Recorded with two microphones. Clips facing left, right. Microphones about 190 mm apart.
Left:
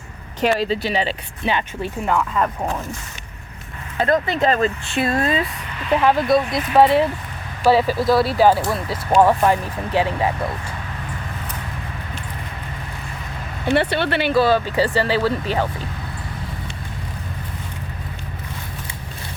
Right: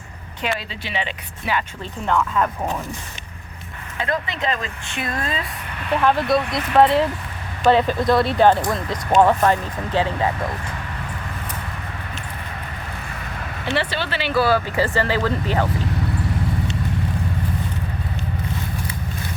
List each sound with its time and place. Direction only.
0.4 s speech: 40° left (ahead or behind)
1.5 s speech: 25° left (ahead or behind)
1.8 s speech: 10° left (ahead or behind)
3.9 s speech: 40° left (ahead or behind)
4.9 s speech: 30° left (ahead or behind)
5.9 s speech: 10° left (ahead or behind)
13.7 s speech: 55° left (ahead or behind)
14.3 s speech: 20° left (ahead or behind)